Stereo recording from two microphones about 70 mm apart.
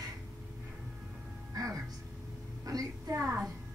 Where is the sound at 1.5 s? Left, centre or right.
Right.